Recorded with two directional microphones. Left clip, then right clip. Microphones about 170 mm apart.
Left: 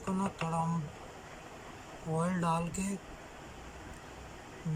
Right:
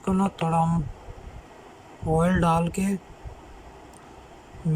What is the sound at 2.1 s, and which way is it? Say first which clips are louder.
Speech: right 10 dB; 50° right (ahead or behind).